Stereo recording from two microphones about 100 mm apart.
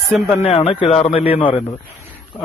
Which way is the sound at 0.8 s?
90° left.